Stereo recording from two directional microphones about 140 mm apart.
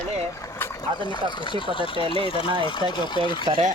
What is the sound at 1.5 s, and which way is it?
Speech, 35° left (ahead or behind).